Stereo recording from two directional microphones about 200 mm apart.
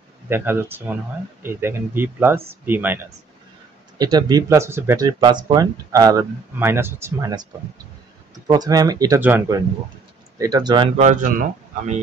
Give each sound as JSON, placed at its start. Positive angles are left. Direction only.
{"t": 0.3, "sound": "speech", "side_deg": -10}
{"t": 4.0, "sound": "speech", "side_deg": -20}
{"t": 8.5, "sound": "speech", "side_deg": -20}
{"t": 11.0, "sound": "speech", "side_deg": -40}